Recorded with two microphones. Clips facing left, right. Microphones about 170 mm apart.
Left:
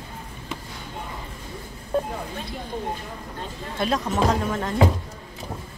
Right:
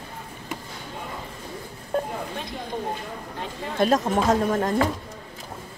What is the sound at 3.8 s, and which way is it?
Speech, 45° right (ahead or behind).